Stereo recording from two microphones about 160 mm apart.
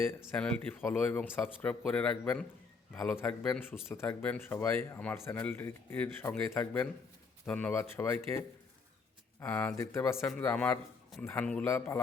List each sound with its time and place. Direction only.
0.0 s speech: 15° left (ahead or behind)